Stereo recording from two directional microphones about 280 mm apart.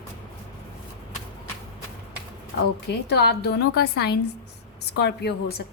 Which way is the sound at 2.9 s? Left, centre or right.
Left.